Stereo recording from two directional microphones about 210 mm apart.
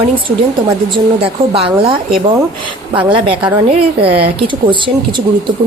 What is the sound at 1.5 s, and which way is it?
Speech, 25° right (ahead or behind).